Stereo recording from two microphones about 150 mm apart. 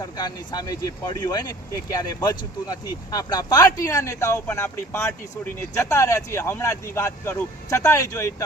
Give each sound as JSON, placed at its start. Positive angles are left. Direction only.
{"t": 0.2, "sound": "speech", "side_deg": 25}